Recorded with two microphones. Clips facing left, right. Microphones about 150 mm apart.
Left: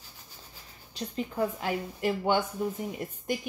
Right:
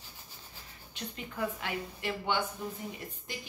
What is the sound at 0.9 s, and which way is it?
A woman's voice, 35° left (ahead or behind).